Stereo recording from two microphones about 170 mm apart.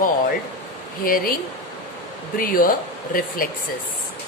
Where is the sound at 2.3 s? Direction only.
55° left (ahead or behind).